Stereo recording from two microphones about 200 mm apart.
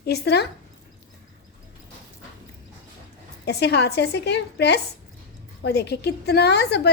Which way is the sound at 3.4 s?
55° left (ahead or behind).